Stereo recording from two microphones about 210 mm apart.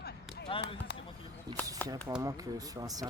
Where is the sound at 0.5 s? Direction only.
25° left (ahead or behind).